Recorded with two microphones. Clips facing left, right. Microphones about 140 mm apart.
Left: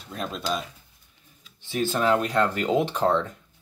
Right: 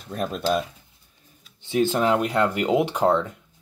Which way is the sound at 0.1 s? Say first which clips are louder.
Right 5 dB; 50° right (ahead or behind).